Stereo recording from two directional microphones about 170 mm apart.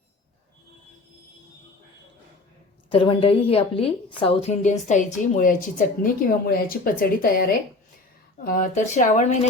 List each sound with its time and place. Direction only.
2.9 s a woman's voice: 30° left (ahead or behind); by 7.4 s 55° left (ahead or behind)
8.4 s speech: 55° left (ahead or behind)